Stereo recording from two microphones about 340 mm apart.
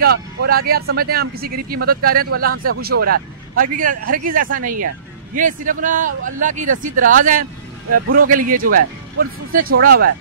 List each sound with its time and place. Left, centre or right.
0.0 s speech: right